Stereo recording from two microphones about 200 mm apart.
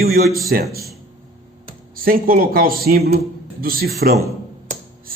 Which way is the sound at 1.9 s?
45° right (ahead or behind).